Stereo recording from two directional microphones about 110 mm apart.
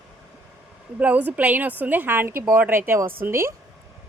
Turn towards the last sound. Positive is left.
turn(degrees=-25)  # may be behind; listen again after turning